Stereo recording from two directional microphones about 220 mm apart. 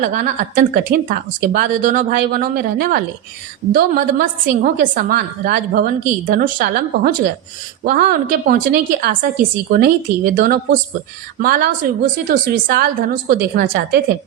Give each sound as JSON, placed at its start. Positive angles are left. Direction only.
{"t": 0.0, "sound": "a woman's voice", "side_deg": -35}